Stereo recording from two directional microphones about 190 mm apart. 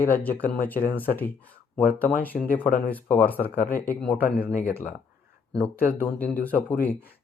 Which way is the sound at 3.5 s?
45° left (ahead or behind).